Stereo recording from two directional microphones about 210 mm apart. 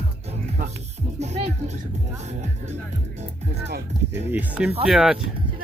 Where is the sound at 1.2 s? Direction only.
30° right (ahead or behind).